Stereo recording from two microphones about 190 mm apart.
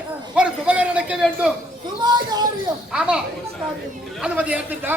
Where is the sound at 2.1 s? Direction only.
20° right (ahead or behind).